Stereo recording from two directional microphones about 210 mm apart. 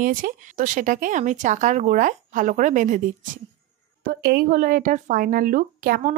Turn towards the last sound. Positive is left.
turn(degrees=-40)  # may be behind; listen again after turning